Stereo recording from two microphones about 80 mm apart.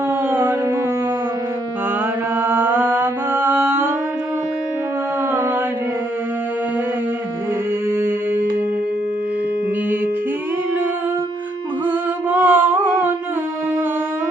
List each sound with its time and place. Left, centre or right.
0.3 s music: right
2.4 s mantra: right
7.9 s music: right
11.9 s music: right